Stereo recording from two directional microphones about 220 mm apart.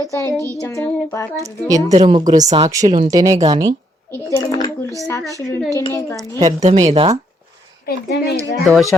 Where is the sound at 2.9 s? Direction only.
15° right (ahead or behind).